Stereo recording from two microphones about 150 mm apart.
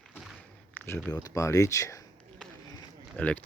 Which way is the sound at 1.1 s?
20° left (ahead or behind).